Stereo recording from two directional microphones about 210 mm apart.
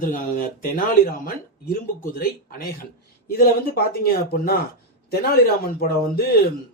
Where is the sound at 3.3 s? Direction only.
50° left (ahead or behind).